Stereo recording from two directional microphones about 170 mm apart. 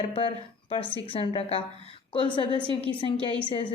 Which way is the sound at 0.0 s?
30° left (ahead or behind).